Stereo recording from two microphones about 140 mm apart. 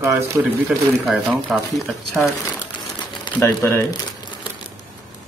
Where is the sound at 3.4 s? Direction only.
20° left (ahead or behind).